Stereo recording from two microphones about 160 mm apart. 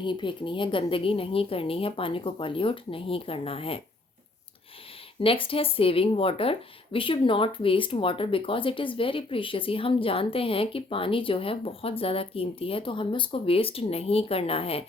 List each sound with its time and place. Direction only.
0.0 s speech: 30° left (ahead or behind)
5.2 s speech: 35° left (ahead or behind)